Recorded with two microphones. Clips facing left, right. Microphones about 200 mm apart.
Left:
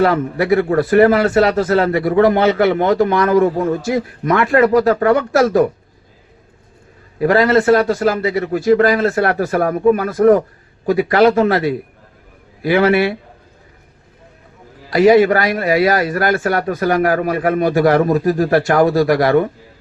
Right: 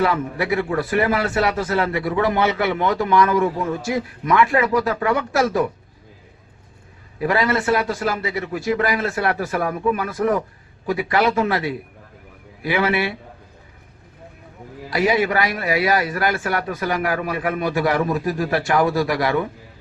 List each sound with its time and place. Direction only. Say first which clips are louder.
0.0 s a man's voice: left 6 dB; 45° left (ahead or behind)
7.2 s a man's voice: left 8 dB; 45° left (ahead or behind)
14.8 s a man's voice: left 9 dB; 40° left (ahead or behind)